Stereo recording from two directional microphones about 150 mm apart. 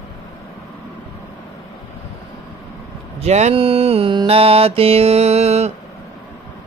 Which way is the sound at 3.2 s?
45° right (ahead or behind).